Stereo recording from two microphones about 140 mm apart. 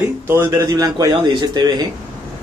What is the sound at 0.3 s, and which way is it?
A man's voice, 20° right (ahead or behind).